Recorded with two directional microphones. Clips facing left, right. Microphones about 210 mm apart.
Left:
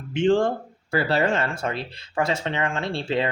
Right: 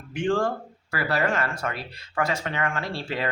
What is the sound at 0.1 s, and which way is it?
Speech, 25° left (ahead or behind).